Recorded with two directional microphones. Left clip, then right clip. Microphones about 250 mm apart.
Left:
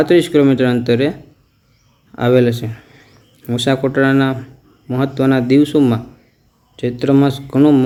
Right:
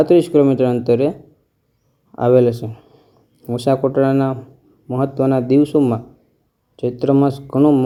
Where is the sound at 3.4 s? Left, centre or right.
Centre.